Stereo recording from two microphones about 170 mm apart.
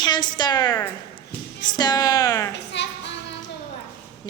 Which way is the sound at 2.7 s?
90° left.